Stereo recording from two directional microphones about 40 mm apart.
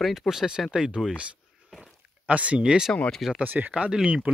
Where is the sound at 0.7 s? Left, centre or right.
Right.